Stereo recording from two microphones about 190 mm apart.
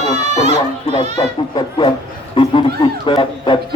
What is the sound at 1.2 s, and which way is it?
Speech, 20° left (ahead or behind).